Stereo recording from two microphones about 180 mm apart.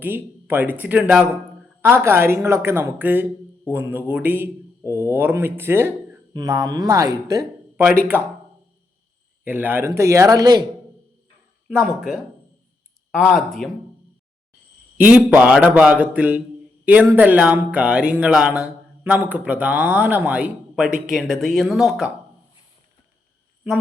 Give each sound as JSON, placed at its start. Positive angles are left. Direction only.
{"t": 0.0, "sound": "speech", "side_deg": -10}
{"t": 9.4, "sound": "speech", "side_deg": -10}
{"t": 11.7, "sound": "speech", "side_deg": -5}
{"t": 13.3, "sound": "speech", "side_deg": 0}
{"t": 14.9, "sound": "speech", "side_deg": -10}